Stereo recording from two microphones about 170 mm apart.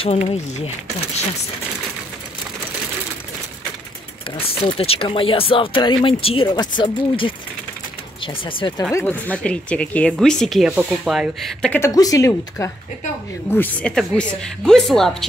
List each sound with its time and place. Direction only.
4.4 s speech: 35° left (ahead or behind)
8.9 s speech: 10° left (ahead or behind)
11.7 s speech: 20° left (ahead or behind); by 15.2 s 5° left (ahead or behind)